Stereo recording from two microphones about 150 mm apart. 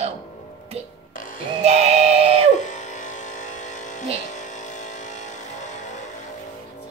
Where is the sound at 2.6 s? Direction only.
55° left (ahead or behind).